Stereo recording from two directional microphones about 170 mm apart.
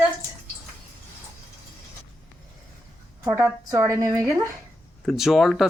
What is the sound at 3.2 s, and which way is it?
A woman's voice, 15° right (ahead or behind).